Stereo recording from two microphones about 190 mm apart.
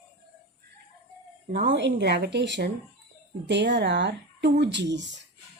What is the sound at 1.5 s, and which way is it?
Speech, 45° right (ahead or behind).